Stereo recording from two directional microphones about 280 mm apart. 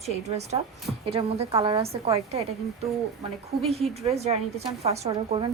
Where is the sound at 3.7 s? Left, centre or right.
Right.